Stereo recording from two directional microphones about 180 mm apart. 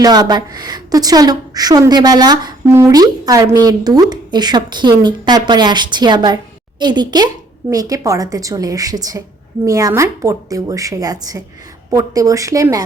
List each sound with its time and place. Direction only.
0.0 s a woman's voice: 20° right (ahead or behind)